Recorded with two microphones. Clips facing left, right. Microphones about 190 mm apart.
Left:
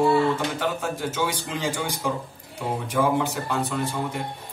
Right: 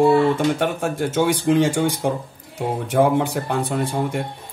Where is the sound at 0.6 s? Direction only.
55° right (ahead or behind).